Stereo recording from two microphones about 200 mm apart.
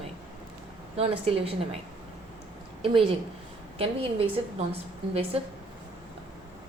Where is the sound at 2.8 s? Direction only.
25° right (ahead or behind).